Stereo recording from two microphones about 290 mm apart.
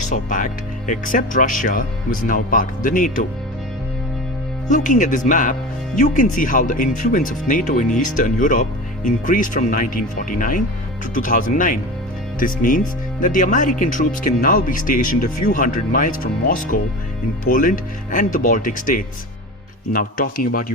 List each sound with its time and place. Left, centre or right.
0.1 s speech: left
4.7 s speech: left